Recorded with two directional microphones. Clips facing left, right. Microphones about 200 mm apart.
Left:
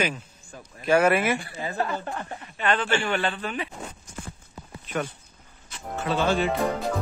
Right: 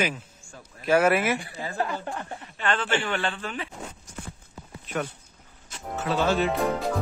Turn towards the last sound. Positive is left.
turn(degrees=0)  # may be behind; listen again after turning